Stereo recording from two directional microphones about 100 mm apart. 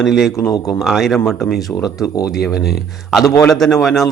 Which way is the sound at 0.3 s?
35° left (ahead or behind).